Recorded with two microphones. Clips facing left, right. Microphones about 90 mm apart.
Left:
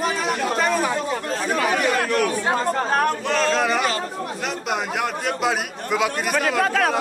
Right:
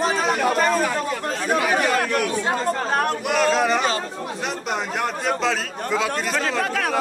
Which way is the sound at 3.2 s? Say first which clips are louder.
Right 1 dB; 10° right (ahead or behind).